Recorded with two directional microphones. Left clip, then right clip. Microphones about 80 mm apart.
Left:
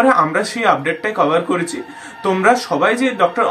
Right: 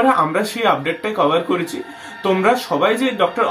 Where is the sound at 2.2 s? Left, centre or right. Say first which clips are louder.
Left 2 dB; centre.